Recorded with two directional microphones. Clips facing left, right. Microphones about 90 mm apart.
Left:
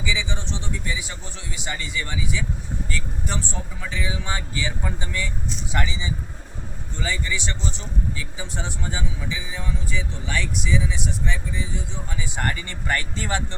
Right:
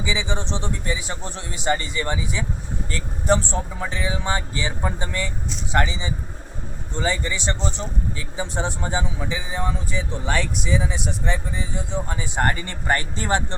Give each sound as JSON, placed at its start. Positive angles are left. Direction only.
{"t": 0.0, "sound": "speech", "side_deg": -25}